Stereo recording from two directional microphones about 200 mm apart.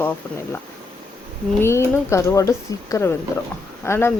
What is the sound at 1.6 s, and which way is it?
Speech, 15° left (ahead or behind).